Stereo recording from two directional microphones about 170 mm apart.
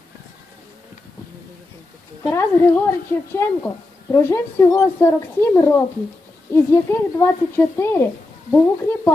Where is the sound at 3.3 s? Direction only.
15° left (ahead or behind).